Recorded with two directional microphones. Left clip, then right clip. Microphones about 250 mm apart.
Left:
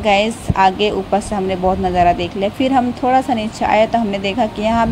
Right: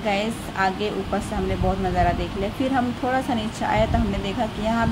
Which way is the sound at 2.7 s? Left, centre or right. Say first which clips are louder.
Left 9 dB; left.